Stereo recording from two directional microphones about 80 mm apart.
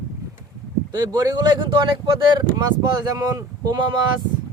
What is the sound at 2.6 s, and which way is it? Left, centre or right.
Speech, right.